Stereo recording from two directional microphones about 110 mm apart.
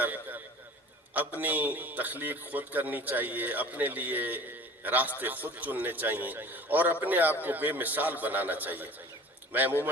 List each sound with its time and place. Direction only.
0.0 s a man's voice: 15° right (ahead or behind)